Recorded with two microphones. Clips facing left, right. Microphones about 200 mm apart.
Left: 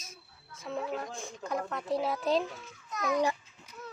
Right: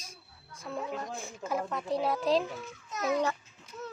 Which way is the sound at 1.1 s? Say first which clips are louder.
Right 1 dB; 5° right (ahead or behind).